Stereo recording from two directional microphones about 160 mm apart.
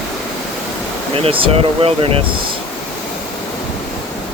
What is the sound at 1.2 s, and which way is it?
Speech, 35° right (ahead or behind).